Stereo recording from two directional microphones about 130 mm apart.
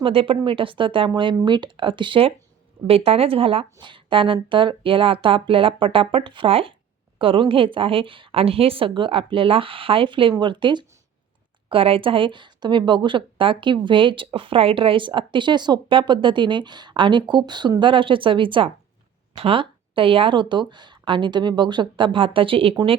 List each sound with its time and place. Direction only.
0.0 s a woman's voice: 45° right (ahead or behind)